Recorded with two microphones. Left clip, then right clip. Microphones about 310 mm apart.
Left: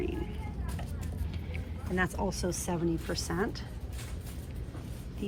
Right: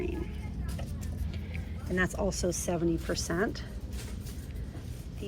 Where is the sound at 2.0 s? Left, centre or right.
Centre.